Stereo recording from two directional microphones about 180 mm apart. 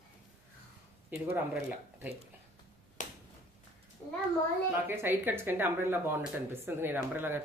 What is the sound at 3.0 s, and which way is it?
Finger snapping, 45° left (ahead or behind).